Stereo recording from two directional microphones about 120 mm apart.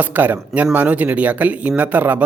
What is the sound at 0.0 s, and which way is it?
Speech, 15° right (ahead or behind).